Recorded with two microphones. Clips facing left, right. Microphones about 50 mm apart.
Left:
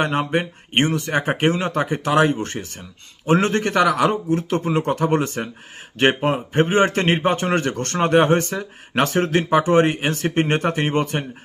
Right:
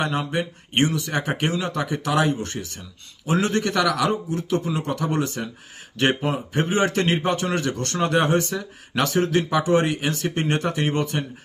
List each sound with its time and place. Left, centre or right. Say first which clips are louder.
0.0 s speech: left 4 dB; left